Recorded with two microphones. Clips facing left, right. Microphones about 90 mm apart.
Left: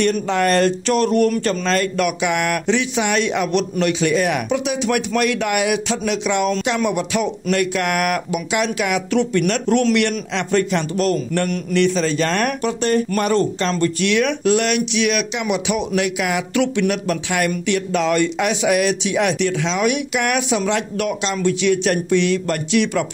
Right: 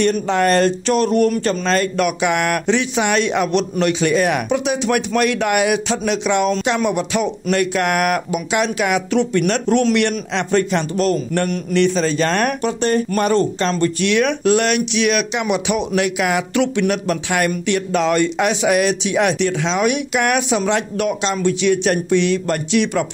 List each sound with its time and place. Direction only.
0.0 s a man's voice: 30° right (ahead or behind)
9.1 s a man's voice: 25° right (ahead or behind)
16.2 s speech: 45° right (ahead or behind)
16.5 s a man's voice: 35° right (ahead or behind)